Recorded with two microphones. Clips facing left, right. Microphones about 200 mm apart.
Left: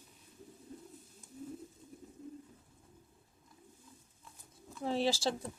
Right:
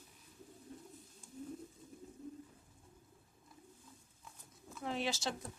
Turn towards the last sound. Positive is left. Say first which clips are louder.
# left 6 dB
turn(degrees=30)  # may be behind; listen again after turning